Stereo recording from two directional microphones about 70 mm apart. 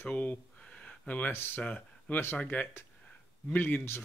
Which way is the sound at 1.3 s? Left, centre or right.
Left.